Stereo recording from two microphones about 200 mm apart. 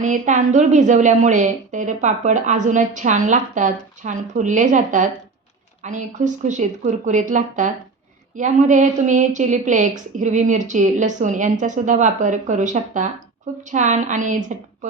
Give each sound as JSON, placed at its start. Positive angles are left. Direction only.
{"t": 0.0, "sound": "a woman's voice", "side_deg": -40}